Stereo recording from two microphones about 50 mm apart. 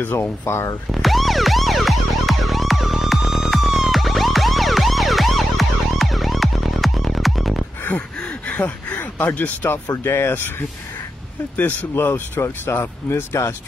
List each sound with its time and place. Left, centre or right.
0.0 s speech: left
0.9 s emergency vehicle: centre
8.2 s a sound: left
8.5 s speech: left
10.0 s speech: left
11.5 s speech: left
11.9 s speech: left